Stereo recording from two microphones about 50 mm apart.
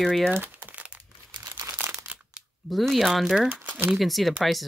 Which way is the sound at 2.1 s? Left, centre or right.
Right.